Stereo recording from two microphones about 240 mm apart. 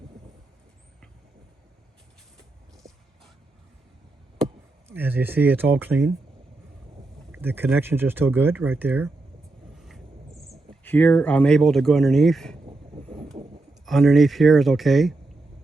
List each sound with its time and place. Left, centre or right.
2.8 s a sound: centre
4.9 s speech: centre
7.3 s speech: centre
10.7 s speech: centre
12.6 s vehicle: right
13.8 s speech: centre